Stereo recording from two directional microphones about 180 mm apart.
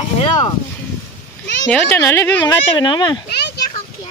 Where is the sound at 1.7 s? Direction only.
10° left (ahead or behind).